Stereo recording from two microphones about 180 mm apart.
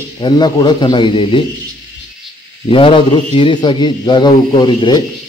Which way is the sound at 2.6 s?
30° left (ahead or behind).